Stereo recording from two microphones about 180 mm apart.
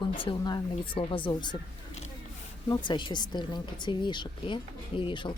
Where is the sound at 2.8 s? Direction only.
25° left (ahead or behind).